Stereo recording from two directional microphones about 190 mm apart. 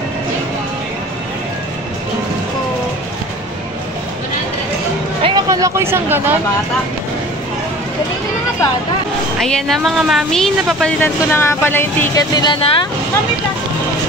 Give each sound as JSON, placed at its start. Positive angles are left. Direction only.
{"t": 5.2, "sound": "speech", "side_deg": -20}
{"t": 9.4, "sound": "a woman's voice", "side_deg": 0}